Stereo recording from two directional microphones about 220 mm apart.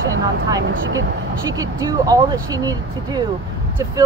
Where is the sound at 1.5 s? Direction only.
15° right (ahead or behind).